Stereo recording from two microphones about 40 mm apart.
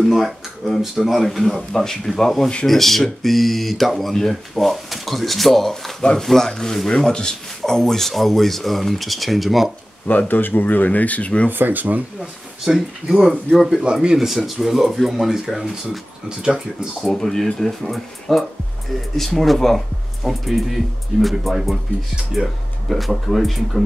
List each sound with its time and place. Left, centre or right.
0.0 s speech: centre
10.0 s speech: left
11.5 s speech: right
12.7 s speech: centre
17.0 s speech: centre